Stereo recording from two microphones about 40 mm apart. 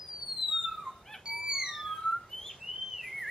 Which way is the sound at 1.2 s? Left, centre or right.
Centre.